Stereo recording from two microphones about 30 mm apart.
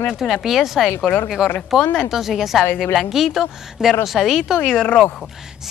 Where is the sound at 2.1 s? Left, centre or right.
Centre.